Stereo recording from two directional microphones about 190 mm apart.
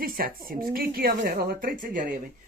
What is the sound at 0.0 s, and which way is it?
A woman's voice, 50° right (ahead or behind).